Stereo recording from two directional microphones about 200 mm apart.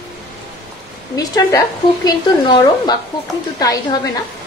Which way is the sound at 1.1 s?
20° left (ahead or behind).